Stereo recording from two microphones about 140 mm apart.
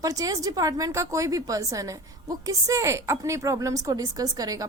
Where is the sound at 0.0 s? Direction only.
25° right (ahead or behind).